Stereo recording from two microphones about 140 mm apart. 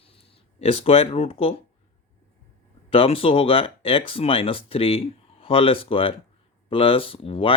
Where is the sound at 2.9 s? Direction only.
45° left (ahead or behind).